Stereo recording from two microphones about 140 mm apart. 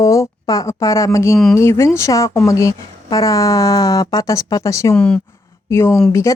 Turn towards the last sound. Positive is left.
turn(degrees=20)  # may be behind; listen again after turning